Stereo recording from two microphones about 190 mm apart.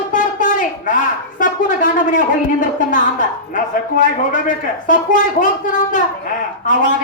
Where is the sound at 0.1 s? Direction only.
45° left (ahead or behind).